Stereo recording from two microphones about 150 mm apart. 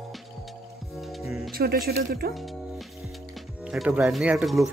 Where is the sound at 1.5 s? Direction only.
90° right.